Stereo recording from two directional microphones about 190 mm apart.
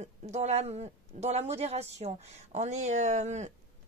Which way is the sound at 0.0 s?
35° right (ahead or behind).